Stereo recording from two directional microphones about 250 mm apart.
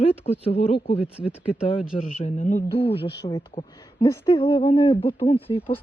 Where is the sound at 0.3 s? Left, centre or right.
Left.